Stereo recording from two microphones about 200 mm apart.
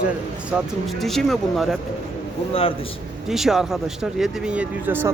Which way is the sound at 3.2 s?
Centre (ahead or behind).